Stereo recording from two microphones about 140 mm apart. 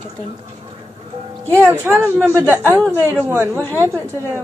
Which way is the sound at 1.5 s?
20° right (ahead or behind).